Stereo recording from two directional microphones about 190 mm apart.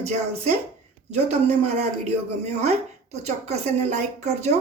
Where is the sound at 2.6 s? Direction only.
35° right (ahead or behind).